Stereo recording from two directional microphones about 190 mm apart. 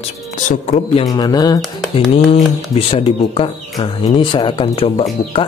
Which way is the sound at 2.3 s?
35° left (ahead or behind).